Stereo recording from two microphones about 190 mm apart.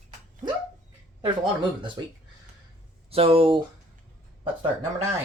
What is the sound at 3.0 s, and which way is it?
Speech, 30° right (ahead or behind).